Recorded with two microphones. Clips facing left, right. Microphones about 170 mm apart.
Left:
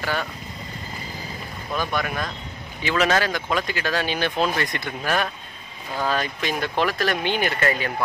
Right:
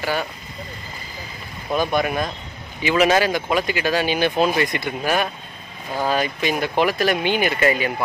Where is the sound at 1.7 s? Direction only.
20° right (ahead or behind).